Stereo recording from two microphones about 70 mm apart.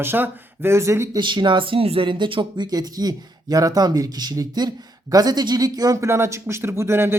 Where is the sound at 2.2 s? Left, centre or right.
Right.